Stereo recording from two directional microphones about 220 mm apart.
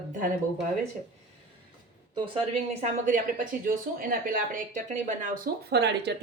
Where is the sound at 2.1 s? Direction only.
25° right (ahead or behind).